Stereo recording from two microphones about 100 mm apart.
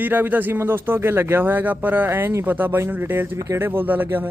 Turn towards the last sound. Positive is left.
turn(degrees=-20)  # may be behind; listen again after turning